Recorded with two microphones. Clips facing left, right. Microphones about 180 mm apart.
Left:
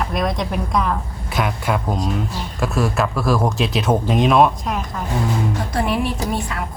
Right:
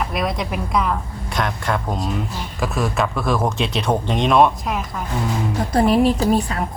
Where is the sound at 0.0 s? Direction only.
5° right (ahead or behind).